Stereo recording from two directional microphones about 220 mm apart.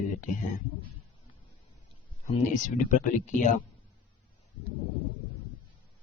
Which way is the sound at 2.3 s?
35° left (ahead or behind).